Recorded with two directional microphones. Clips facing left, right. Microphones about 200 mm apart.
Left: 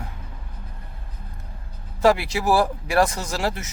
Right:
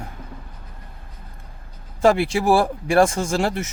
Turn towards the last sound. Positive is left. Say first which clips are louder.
# right 5 dB
turn(degrees=-25)  # may be behind; listen again after turning